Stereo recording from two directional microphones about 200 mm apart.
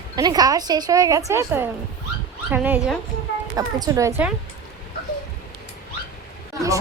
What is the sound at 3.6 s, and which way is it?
Speech, 15° right (ahead or behind).